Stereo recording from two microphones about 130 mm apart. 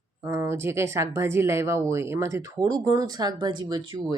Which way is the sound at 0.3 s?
20° right (ahead or behind).